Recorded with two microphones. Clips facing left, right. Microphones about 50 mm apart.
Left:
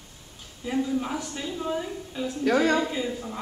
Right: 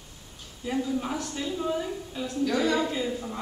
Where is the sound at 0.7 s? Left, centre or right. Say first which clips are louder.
Left 2 dB; centre.